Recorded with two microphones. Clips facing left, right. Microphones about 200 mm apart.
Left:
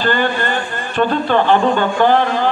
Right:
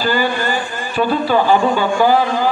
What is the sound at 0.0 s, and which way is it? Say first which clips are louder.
A man's voice: even; 5° right (ahead or behind).